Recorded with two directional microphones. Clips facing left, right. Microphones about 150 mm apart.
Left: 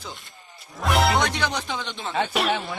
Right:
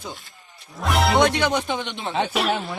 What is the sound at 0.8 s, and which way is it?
Speech, centre (ahead or behind).